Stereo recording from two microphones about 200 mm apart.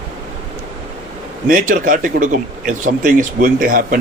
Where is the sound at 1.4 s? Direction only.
40° right (ahead or behind).